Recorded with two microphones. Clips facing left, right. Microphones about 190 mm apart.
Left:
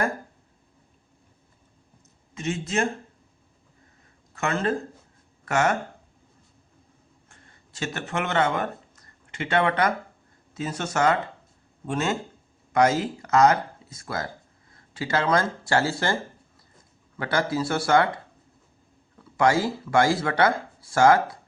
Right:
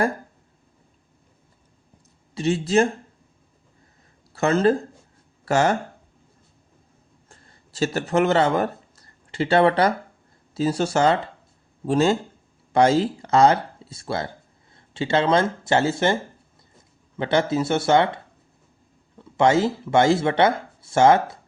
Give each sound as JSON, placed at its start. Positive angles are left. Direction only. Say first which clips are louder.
{"t": 2.3, "sound": "speech", "louder": "right 8 dB", "side_deg": -35}
{"t": 4.3, "sound": "speech", "louder": "right 7 dB", "side_deg": -35}
{"t": 7.3, "sound": "a sound", "louder": "right 4 dB", "side_deg": -35}
{"t": 10.5, "sound": "speech", "louder": "right 7 dB", "side_deg": -35}
{"t": 17.2, "sound": "speech", "louder": "right 4 dB", "side_deg": -25}
{"t": 19.2, "sound": "speech", "louder": "right 3 dB", "side_deg": -25}